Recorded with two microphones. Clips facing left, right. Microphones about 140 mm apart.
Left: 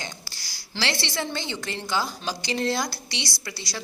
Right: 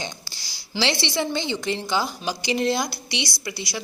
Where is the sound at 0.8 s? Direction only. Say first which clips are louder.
Right 5 dB; 15° right (ahead or behind).